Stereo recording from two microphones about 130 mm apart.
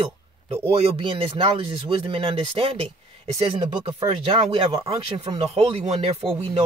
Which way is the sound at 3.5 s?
30° right (ahead or behind).